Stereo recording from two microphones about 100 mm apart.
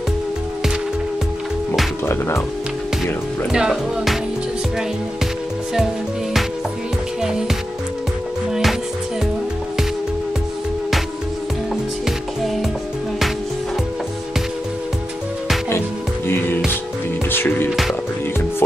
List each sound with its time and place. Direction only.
2.0 s speech: 25° left (ahead or behind)
3.5 s speech: 5° right (ahead or behind)
7.2 s music: 5° right (ahead or behind)
17.3 s music: 20° left (ahead or behind)